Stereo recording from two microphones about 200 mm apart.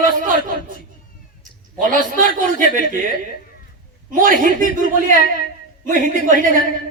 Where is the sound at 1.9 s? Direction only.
40° right (ahead or behind).